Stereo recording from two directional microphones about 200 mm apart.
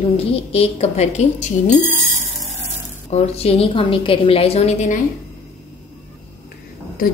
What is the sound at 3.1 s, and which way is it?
A woman's voice, 30° left (ahead or behind).